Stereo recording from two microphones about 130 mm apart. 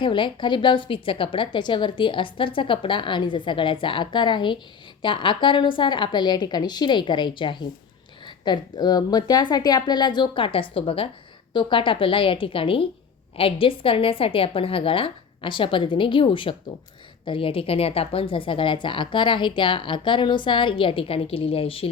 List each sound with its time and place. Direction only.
0.0 s a woman's voice: 40° left (ahead or behind)